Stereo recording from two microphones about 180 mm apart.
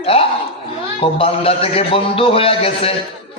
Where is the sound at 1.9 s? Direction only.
30° left (ahead or behind).